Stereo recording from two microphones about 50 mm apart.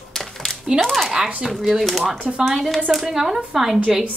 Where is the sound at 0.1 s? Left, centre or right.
Centre.